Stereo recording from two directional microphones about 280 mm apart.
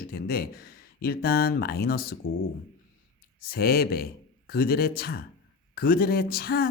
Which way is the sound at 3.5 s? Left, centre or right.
Left.